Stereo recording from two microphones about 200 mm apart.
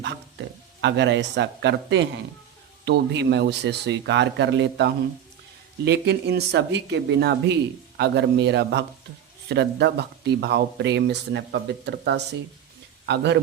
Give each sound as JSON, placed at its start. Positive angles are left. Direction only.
{"t": 0.8, "sound": "speech", "side_deg": -60}